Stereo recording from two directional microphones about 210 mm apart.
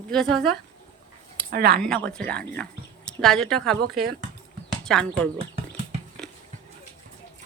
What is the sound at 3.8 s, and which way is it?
Speech, 50° right (ahead or behind).